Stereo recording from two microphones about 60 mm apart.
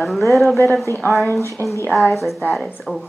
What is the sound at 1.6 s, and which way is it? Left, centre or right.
Speech, right.